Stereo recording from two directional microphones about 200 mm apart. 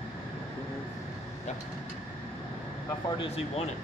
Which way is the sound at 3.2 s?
30° left (ahead or behind).